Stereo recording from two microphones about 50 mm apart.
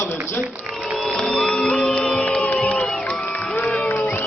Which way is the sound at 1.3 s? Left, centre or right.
Centre.